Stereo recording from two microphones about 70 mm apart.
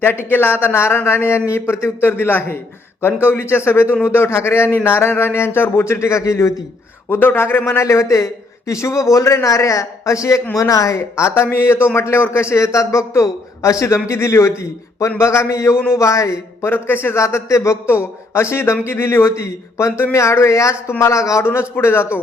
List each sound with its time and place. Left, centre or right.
0.0 s a man's voice: left
7.1 s a man's voice: left
16.7 s a man's voice: left